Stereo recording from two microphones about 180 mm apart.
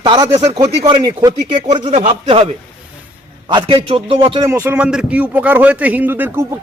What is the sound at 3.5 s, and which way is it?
A man's voice, 25° right (ahead or behind).